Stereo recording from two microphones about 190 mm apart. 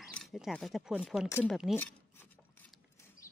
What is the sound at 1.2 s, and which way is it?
Speech, 10° left (ahead or behind).